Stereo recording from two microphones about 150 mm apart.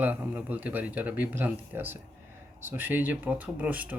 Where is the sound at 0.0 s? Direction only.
10° right (ahead or behind).